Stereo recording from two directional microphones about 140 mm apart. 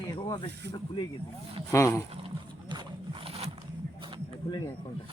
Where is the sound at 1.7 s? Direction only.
20° left (ahead or behind).